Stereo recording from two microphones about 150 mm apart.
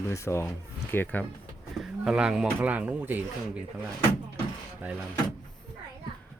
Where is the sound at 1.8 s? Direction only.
5° right (ahead or behind).